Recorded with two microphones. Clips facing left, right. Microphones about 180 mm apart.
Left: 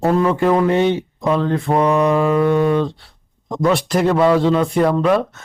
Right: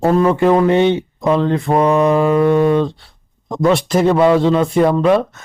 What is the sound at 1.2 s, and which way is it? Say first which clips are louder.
Speech: right 3 dB; 20° right (ahead or behind).